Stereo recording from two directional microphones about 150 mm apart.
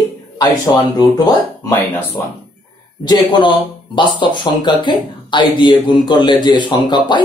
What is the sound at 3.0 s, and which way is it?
Speech, 30° left (ahead or behind).